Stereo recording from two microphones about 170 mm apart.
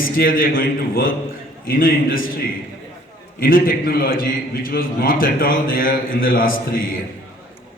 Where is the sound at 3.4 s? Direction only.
55° left (ahead or behind).